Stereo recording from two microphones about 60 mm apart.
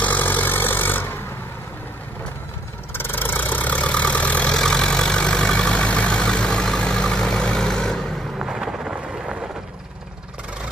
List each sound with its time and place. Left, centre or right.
0.0 s vehicle: left
2.9 s vehicle: left
4.6 s vehicle: centre
8.5 s vehicle: centre